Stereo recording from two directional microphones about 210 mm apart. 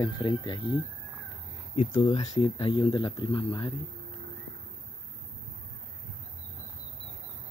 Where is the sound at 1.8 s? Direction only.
25° left (ahead or behind).